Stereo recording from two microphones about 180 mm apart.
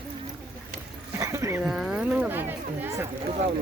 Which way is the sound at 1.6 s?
5° right (ahead or behind).